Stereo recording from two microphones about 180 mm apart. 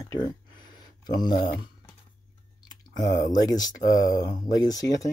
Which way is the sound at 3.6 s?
20° left (ahead or behind).